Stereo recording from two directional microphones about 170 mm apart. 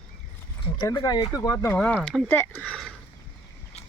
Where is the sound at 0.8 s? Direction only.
25° left (ahead or behind); by 2.9 s 5° left (ahead or behind).